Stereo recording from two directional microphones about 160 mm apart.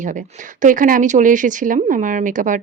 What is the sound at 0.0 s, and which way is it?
Speech, 55° right (ahead or behind).